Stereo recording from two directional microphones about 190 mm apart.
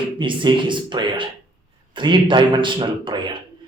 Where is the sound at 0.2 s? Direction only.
25° right (ahead or behind).